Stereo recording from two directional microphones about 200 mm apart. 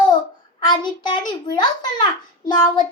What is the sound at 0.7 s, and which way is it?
A child's voice, 20° left (ahead or behind).